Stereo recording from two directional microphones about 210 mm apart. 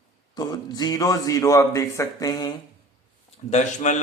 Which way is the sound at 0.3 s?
20° left (ahead or behind).